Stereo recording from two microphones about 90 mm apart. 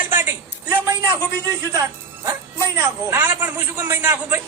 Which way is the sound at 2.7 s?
25° right (ahead or behind).